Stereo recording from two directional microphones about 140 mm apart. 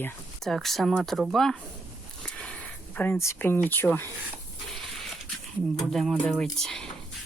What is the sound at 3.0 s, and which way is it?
Speech, 15° left (ahead or behind).